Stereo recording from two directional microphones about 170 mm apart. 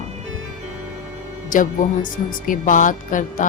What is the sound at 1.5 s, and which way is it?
Music, 50° left (ahead or behind).